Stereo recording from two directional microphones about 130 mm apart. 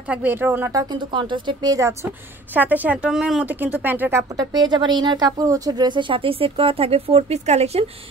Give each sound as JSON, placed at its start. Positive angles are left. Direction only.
{"t": 0.1, "sound": "speech", "side_deg": -15}
{"t": 0.9, "sound": "speech", "side_deg": -35}
{"t": 2.5, "sound": "speech", "side_deg": -15}
{"t": 4.6, "sound": "speech", "side_deg": -35}